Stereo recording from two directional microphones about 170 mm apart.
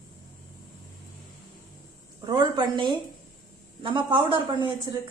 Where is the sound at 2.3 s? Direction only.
25° right (ahead or behind).